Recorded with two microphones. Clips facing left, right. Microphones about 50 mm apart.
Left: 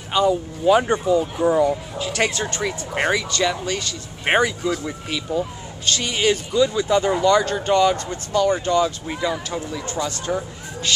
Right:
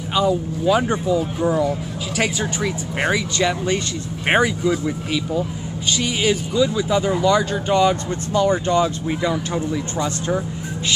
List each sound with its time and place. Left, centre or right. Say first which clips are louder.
0.3 s speech: left 3 dB; centre
2.1 s speech: right 1 dB; centre
3.3 s speech: right 2 dB; right
4.3 s speech: right 1 dB; centre
7.9 s speech: right 1 dB; right
9.2 s speech: right 1 dB; centre